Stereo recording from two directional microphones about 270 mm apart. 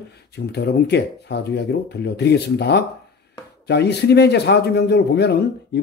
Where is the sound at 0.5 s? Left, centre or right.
Left.